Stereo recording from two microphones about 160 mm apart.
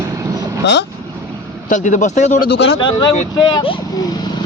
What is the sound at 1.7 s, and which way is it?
Speech, 50° left (ahead or behind).